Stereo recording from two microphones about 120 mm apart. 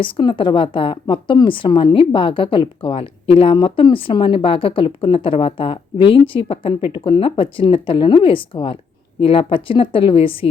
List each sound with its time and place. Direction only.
0.0 s a woman's voice: 40° left (ahead or behind)